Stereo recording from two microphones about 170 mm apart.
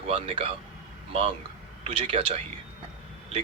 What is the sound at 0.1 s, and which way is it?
Speech, 35° right (ahead or behind).